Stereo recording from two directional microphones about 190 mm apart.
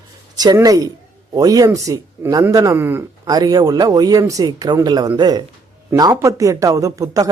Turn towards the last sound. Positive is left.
turn(degrees=-20)  # may be behind; listen again after turning